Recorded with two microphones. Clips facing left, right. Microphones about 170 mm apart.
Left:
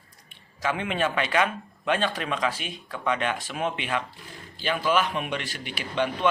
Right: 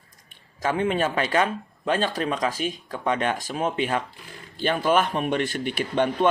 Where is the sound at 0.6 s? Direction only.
40° right (ahead or behind).